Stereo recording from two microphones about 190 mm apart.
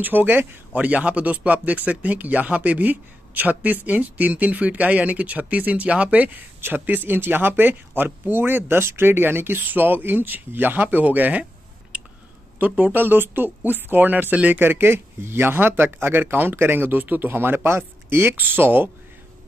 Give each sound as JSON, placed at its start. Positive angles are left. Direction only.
{"t": 0.0, "sound": "speech", "side_deg": -10}
{"t": 12.5, "sound": "speech", "side_deg": -10}